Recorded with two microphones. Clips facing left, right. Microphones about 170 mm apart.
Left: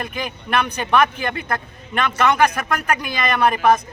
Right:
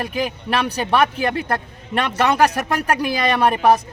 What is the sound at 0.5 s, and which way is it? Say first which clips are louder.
A man's voice: left 1 dB; 35° right (ahead or behind).